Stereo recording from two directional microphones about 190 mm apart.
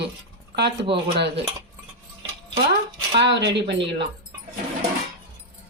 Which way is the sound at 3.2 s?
65° right (ahead or behind).